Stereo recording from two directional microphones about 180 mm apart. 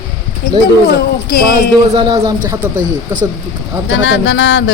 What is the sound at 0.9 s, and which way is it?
Speech, 55° left (ahead or behind).